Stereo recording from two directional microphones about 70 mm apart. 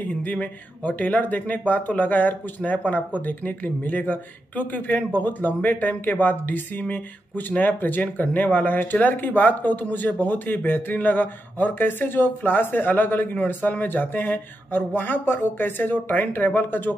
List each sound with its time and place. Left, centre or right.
0.2 s speech: left